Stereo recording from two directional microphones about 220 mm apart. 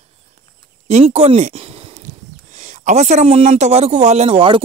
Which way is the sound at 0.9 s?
30° right (ahead or behind).